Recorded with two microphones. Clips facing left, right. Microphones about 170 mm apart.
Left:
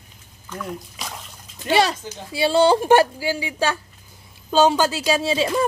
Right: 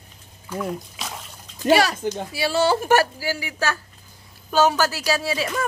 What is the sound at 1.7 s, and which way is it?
Speech, 25° left (ahead or behind).